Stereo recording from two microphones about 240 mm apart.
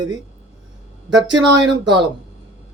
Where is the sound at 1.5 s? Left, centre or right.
Right.